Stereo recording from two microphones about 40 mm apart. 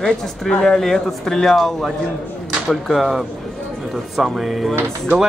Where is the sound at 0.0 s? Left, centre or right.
Centre.